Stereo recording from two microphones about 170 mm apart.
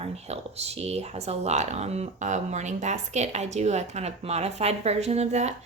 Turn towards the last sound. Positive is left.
turn(degrees=-40)  # may be behind; listen again after turning